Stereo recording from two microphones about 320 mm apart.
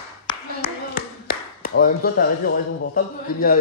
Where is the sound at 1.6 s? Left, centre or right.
Left.